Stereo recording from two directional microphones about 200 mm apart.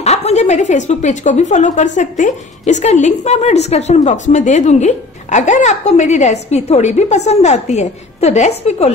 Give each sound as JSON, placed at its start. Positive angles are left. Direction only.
{"t": 0.0, "sound": "a woman's voice", "side_deg": 30}